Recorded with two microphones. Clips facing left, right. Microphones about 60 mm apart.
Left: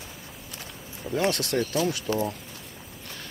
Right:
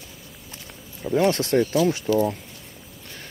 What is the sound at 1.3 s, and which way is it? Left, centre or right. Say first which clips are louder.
Speech: right 6 dB; right.